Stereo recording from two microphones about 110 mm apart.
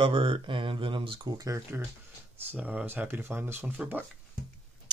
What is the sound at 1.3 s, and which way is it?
Speech, 30° right (ahead or behind).